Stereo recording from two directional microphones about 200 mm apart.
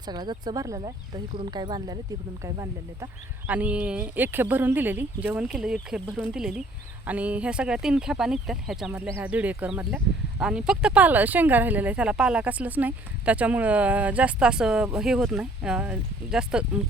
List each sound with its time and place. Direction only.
0.1 s speech: 20° right (ahead or behind); by 16.6 s 5° right (ahead or behind)